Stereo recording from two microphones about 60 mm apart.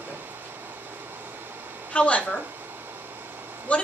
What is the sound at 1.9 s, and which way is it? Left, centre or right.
Speech, left.